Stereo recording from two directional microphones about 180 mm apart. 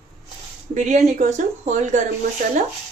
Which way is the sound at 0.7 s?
40° right (ahead or behind).